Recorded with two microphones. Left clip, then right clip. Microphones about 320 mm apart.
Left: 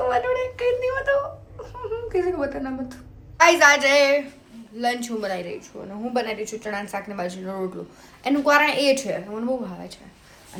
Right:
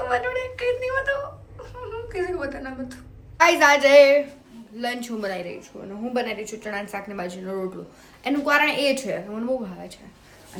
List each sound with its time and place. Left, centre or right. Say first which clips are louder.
0.0 s speech: left 3 dB; left
3.3 s a woman's voice: left 1 dB; centre